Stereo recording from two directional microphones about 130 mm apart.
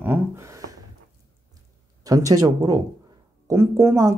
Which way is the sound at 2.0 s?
25° right (ahead or behind).